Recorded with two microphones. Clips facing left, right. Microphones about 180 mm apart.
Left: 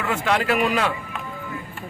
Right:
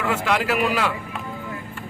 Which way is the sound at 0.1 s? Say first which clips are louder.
Left 2 dB; 5° right (ahead or behind).